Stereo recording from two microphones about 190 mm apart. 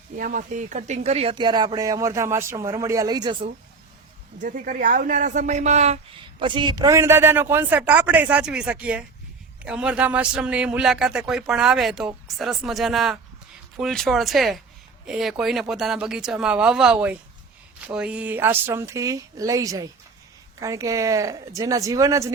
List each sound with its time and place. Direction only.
0.2 s speech: 45° right (ahead or behind); by 3.3 s 20° right (ahead or behind)
4.4 s a man's voice: 45° right (ahead or behind)
6.4 s a man's voice: 25° right (ahead or behind)